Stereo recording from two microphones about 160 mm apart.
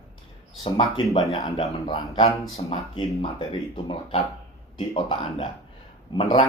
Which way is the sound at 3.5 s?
35° left (ahead or behind).